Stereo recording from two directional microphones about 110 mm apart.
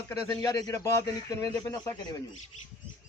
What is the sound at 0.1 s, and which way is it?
A man's voice, 30° left (ahead or behind).